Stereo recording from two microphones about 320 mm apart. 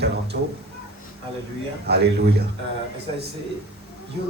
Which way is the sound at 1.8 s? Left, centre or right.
Right.